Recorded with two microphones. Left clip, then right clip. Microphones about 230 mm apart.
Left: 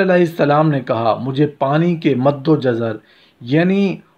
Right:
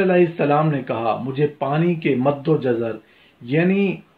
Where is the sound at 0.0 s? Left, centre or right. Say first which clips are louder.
Left 3 dB; left.